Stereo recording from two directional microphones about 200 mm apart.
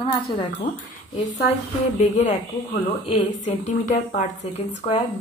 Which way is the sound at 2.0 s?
35° left (ahead or behind).